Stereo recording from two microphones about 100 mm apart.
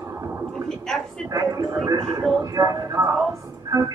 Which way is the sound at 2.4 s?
35° right (ahead or behind).